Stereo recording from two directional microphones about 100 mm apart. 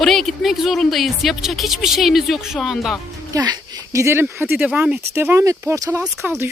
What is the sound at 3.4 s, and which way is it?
Speech, 40° right (ahead or behind).